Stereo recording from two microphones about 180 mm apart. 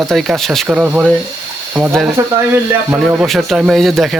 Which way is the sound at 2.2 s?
15° right (ahead or behind).